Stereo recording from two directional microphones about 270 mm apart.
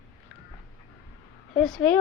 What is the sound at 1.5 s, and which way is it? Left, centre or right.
Speech, centre.